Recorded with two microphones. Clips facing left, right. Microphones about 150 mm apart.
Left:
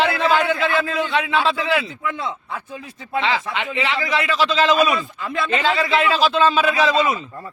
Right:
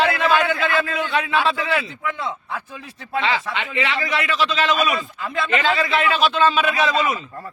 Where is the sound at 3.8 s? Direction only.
25° left (ahead or behind).